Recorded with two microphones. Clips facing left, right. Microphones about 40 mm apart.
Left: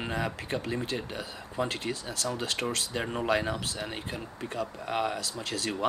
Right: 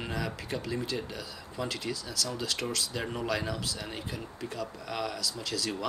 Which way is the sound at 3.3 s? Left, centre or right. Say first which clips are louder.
Left 4 dB; left.